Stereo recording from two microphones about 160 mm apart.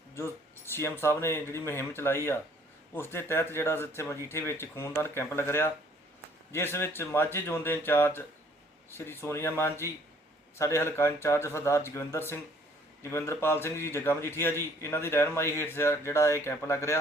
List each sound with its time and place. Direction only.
0.1 s a man's voice: 15° left (ahead or behind)